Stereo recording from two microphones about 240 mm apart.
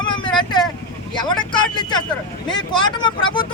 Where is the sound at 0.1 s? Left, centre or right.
Centre.